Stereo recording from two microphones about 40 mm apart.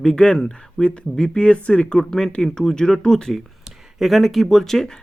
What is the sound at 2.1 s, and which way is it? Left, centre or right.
Speech, centre.